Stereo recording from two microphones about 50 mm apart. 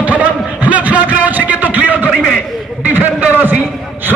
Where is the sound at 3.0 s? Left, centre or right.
Right.